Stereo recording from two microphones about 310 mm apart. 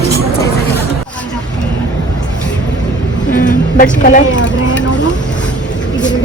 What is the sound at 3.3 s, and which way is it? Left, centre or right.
Vehicle, left.